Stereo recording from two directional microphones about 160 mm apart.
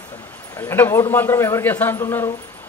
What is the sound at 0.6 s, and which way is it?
A man's voice, 15° left (ahead or behind).